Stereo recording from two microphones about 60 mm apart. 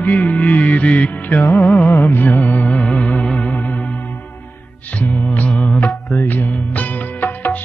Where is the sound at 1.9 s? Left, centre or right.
Left; by 3.5 s centre.